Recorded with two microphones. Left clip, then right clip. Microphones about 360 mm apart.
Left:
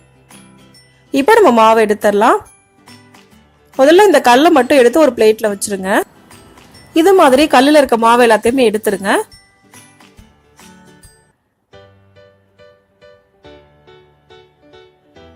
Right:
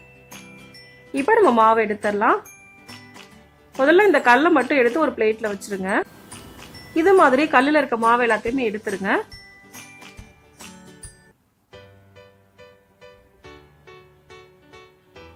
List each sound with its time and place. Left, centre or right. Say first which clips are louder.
0.4 s music: right 1 dB; centre
1.1 s speech: left 8 dB; centre
3.8 s speech: left 8 dB; centre
10.8 s music: left 2 dB; centre